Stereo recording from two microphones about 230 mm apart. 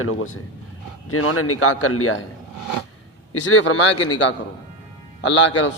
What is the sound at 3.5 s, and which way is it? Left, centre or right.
Speech, left.